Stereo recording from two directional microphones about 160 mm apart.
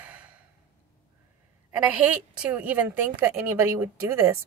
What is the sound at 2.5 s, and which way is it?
A woman's voice, 10° right (ahead or behind).